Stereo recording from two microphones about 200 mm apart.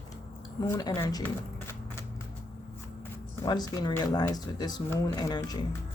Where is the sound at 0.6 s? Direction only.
20° left (ahead or behind).